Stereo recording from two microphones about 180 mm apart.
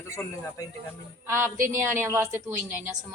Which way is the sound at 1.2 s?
15° right (ahead or behind).